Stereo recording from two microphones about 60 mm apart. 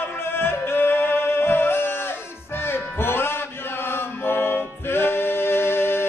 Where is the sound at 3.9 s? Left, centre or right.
Left.